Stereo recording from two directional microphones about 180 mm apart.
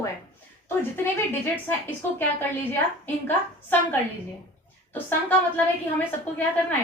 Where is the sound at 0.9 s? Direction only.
10° left (ahead or behind).